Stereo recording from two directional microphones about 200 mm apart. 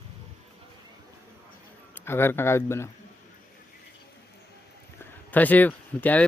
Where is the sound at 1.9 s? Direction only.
10° left (ahead or behind).